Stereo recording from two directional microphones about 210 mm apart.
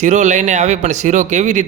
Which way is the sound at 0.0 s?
35° right (ahead or behind).